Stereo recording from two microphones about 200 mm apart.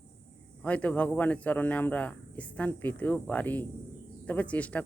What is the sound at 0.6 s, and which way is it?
Speech, 5° left (ahead or behind).